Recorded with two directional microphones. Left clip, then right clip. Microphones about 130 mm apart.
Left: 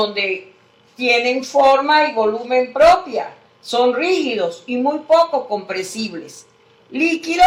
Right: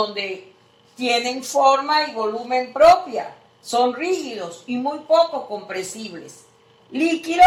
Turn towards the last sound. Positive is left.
turn(degrees=30)  # may be behind; listen again after turning